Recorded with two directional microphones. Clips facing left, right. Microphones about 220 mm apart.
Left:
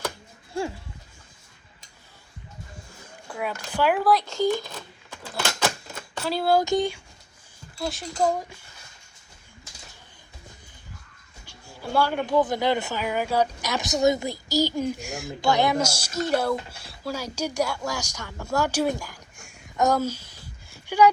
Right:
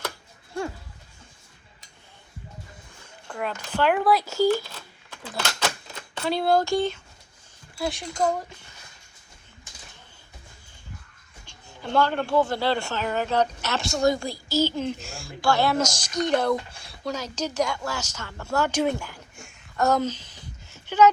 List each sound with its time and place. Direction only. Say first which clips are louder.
3.2 s speech: even; 5° left (ahead or behind)
4.6 s a sound: left 5 dB; 15° left (ahead or behind)
5.3 s typewriter: left 2 dB; 5° left (ahead or behind)
6.7 s speech: left 1 dB; 15° left (ahead or behind)
7.8 s speech: right 2 dB; centre (ahead or behind)
8.2 s speech: left 1 dB; 10° left (ahead or behind)
11.8 s speech: right 1 dB; 10° left (ahead or behind)
19.7 s a sound: even; 15° left (ahead or behind)